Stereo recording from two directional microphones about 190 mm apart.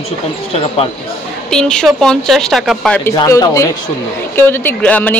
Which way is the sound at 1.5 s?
5° left (ahead or behind).